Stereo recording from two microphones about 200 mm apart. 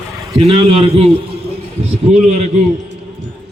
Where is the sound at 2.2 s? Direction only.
35° right (ahead or behind).